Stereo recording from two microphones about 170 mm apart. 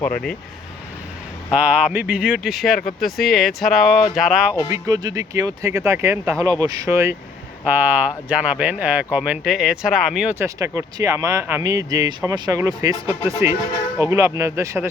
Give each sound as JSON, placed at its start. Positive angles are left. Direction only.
{"t": 0.0, "sound": "speech", "side_deg": 5}
{"t": 1.5, "sound": "speech", "side_deg": -5}
{"t": 4.7, "sound": "speech", "side_deg": -20}